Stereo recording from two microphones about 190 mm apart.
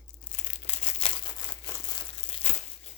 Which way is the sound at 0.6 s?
35° left (ahead or behind).